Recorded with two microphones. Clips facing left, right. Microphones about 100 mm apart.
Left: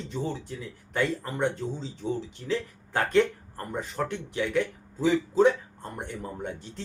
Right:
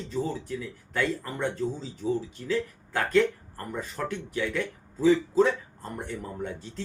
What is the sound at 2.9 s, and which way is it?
Speech, 20° left (ahead or behind).